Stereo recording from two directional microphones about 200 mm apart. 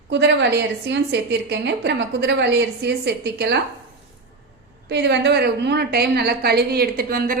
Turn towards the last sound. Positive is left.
turn(degrees=-45)  # may be behind; listen again after turning